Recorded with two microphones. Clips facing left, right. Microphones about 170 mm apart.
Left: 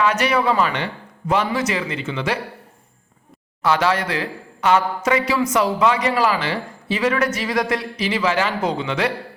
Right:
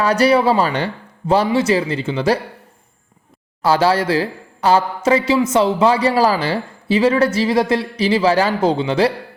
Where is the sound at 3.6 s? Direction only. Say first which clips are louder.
Right 4 dB; 35° right (ahead or behind).